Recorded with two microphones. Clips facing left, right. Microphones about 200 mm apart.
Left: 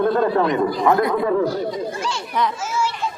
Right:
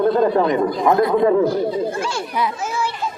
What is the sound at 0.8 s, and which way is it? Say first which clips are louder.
Speech: right 4 dB; 25° right (ahead or behind).